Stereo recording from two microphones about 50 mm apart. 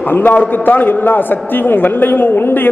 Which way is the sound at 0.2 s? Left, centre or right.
Left.